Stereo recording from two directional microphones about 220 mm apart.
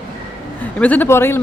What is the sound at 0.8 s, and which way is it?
Speech, 5° left (ahead or behind).